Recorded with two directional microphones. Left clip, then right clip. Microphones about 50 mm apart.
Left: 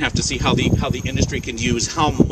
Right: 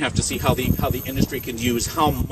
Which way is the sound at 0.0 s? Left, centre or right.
Left.